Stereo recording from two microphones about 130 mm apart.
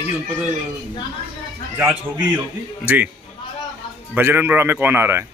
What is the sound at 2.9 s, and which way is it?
Speech, 15° right (ahead or behind).